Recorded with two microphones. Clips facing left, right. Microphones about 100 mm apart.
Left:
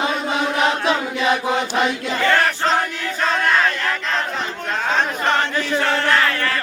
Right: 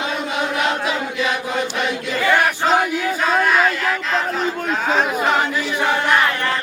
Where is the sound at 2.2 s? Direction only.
10° right (ahead or behind).